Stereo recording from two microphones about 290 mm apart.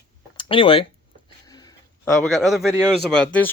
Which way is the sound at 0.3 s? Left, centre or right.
Centre.